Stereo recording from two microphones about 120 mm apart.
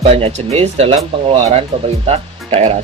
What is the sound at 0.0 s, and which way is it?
Speech, 55° right (ahead or behind).